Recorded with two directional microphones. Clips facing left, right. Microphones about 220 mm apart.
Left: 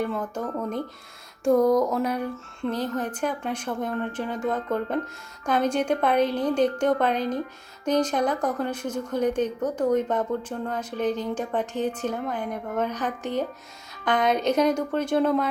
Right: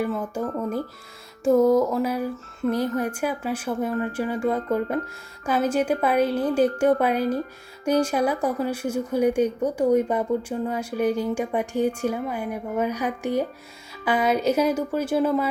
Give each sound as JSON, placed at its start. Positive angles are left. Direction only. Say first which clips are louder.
{"t": 0.0, "sound": "a woman's voice", "louder": "right 2 dB", "side_deg": -5}
{"t": 1.5, "sound": "a sound", "louder": "right 2 dB", "side_deg": -5}
{"t": 2.6, "sound": "a woman's voice", "louder": "right 4 dB", "side_deg": -10}